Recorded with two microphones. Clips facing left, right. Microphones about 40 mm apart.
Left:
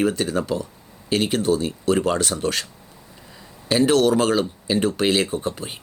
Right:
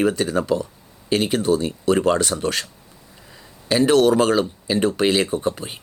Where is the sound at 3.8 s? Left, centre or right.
Right.